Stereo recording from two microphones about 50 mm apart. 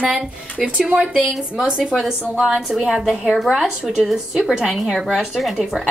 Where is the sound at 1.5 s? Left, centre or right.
Centre.